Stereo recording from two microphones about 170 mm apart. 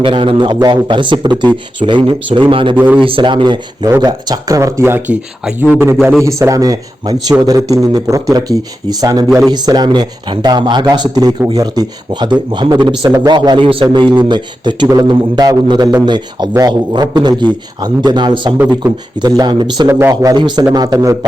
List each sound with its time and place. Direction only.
0.0 s speech: 30° right (ahead or behind)
2.7 s speech: 10° right (ahead or behind)
3.0 s speech: 30° right (ahead or behind)